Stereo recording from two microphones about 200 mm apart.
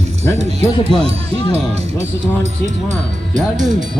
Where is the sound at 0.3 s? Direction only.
30° right (ahead or behind).